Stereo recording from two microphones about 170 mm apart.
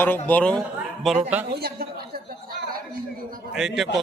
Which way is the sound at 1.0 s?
10° right (ahead or behind).